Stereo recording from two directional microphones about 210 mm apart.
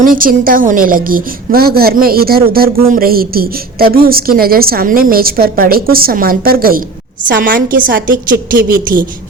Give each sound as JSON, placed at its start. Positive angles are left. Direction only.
{"t": 0.0, "sound": "a woman's voice", "side_deg": -40}